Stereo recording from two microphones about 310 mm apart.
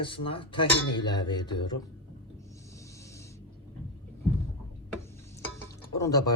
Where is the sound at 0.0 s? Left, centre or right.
Centre.